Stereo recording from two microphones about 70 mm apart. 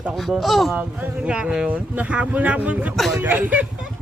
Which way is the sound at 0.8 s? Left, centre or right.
Centre.